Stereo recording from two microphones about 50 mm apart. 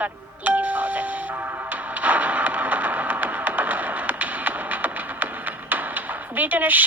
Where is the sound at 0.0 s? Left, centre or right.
Right.